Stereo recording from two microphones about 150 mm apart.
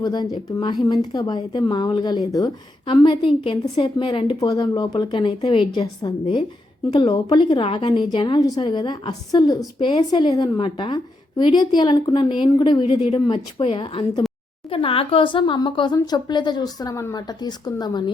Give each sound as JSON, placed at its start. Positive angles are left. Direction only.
{"t": 0.0, "sound": "a woman's voice", "side_deg": 30}
{"t": 4.4, "sound": "a woman's voice", "side_deg": 25}